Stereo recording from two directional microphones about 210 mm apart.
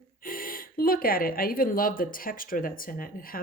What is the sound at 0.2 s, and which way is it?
Speech, 40° left (ahead or behind).